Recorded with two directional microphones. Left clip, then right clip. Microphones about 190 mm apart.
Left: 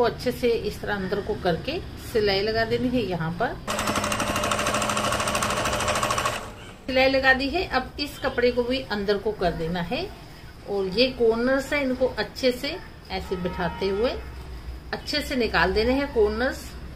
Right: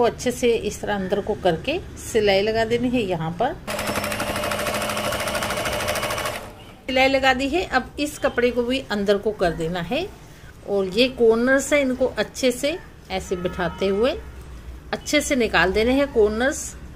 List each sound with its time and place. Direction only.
0.0 s a woman's voice: 35° right (ahead or behind)
4.0 s jackhammer: centre (ahead or behind)
5.0 s jackhammer: 20° right (ahead or behind)
5.5 s jackhammer: 5° right (ahead or behind)
6.9 s a woman's voice: 40° right (ahead or behind)